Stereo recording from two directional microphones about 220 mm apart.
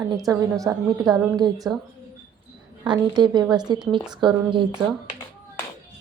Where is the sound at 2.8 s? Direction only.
20° right (ahead or behind).